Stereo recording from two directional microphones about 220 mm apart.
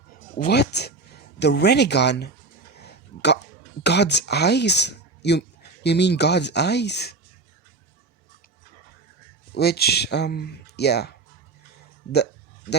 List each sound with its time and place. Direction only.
0.3 s speech: 45° left (ahead or behind)
2.7 s a sound: 50° left (ahead or behind)
3.8 s speech: 50° left (ahead or behind)
9.6 s speech: 45° left (ahead or behind)